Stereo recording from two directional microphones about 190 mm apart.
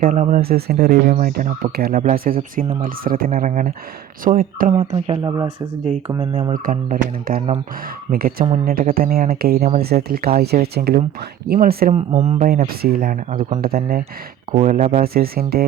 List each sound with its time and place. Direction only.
0.0 s speech: 40° right (ahead or behind)
4.8 s speech: 30° right (ahead or behind)
6.5 s speech: 45° right (ahead or behind)
12.2 s speech: 40° right (ahead or behind)
14.5 s speech: 40° right (ahead or behind)